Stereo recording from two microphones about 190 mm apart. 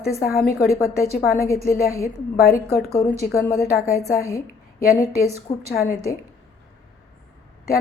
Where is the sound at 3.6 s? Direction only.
55° left (ahead or behind).